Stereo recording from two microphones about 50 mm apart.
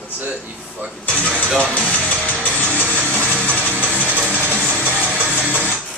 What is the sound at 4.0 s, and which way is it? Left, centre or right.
Music, right.